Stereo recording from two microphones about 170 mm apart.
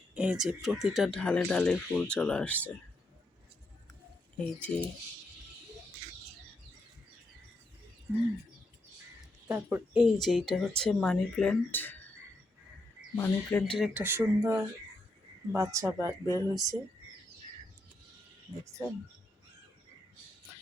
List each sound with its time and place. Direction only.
0.1 s speech: 5° right (ahead or behind)
4.4 s speech: 5° left (ahead or behind)
9.5 s speech: 10° right (ahead or behind); by 11.9 s 10° left (ahead or behind)
13.1 s speech: 10° left (ahead or behind)
14.0 s speech: 15° right (ahead or behind)